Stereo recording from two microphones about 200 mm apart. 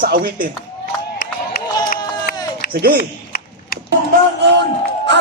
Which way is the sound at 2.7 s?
50° right (ahead or behind).